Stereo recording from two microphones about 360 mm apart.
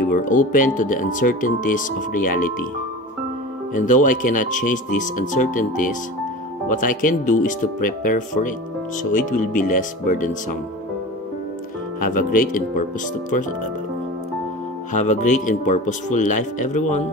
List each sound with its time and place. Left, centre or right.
0.0 s speech: left
3.7 s speech: left
12.0 s speech: left
14.9 s speech: centre